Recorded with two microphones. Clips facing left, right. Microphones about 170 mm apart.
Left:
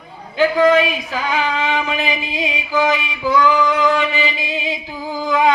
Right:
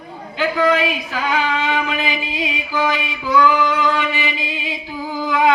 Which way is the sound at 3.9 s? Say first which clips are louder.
Left 2 dB; 20° left (ahead or behind).